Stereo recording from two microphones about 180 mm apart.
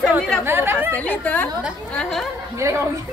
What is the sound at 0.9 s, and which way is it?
A woman's voice, 10° left (ahead or behind).